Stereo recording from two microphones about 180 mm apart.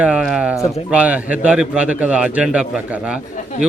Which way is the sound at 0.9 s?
10° right (ahead or behind).